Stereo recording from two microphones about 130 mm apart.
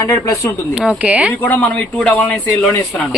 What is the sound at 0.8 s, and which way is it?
Speech, 10° right (ahead or behind).